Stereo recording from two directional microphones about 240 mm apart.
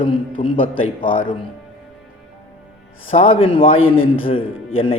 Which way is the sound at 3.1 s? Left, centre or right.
Left.